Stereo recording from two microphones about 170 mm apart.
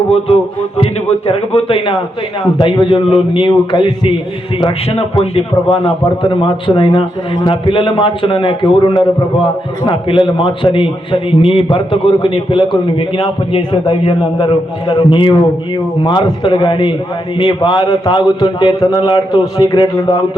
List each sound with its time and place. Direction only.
1.3 s a man's voice: 35° left (ahead or behind)